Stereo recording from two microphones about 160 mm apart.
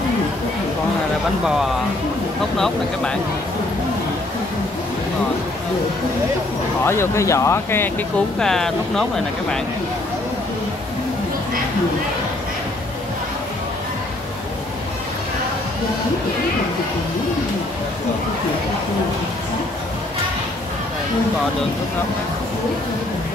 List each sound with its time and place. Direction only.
1.4 s speech: 5° right (ahead or behind)
6.8 s speech: 15° left (ahead or behind)
8.4 s speech: 5° left (ahead or behind)